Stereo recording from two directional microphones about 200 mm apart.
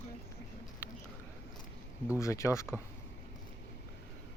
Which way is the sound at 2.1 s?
15° left (ahead or behind).